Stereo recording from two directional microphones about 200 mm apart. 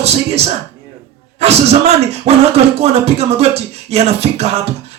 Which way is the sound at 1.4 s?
30° right (ahead or behind).